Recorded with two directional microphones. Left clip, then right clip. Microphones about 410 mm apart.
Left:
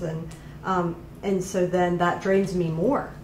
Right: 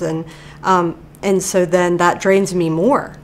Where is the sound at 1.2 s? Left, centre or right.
Right.